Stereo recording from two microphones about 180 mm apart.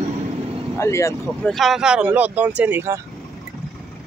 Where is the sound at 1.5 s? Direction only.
Centre (ahead or behind).